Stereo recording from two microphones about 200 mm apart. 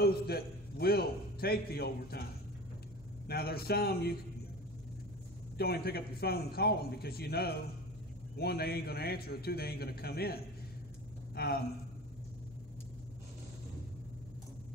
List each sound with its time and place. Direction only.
0.0 s a man's voice: 50° left (ahead or behind)
3.3 s a man's voice: 50° left (ahead or behind)
5.6 s a man's voice: 50° left (ahead or behind)